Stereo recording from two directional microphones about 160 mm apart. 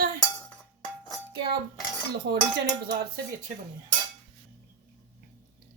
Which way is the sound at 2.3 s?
85° right.